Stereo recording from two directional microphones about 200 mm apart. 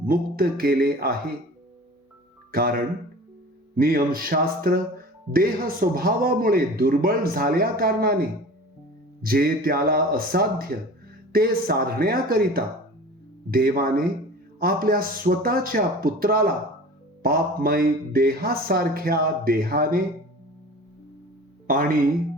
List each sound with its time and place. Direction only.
0.0 s speech: 45° right (ahead or behind)
2.5 s speech: 50° right (ahead or behind)
21.7 s speech: 45° right (ahead or behind)